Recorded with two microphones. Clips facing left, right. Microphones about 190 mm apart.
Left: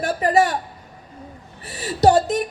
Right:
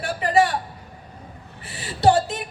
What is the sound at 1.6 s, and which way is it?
Speech, 40° left (ahead or behind).